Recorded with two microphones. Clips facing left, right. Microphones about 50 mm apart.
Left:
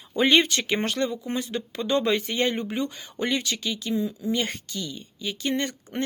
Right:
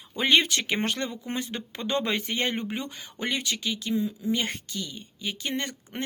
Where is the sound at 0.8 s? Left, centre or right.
Right.